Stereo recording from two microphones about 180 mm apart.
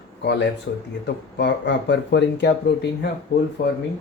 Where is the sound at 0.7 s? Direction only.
75° left (ahead or behind).